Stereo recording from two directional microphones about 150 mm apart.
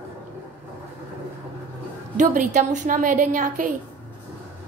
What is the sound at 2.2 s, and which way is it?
A woman's voice, 55° right (ahead or behind).